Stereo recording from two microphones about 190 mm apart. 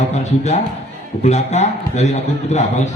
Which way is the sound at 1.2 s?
35° left (ahead or behind).